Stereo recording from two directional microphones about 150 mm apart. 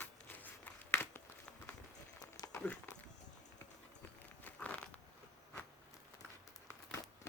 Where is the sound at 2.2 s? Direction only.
25° left (ahead or behind).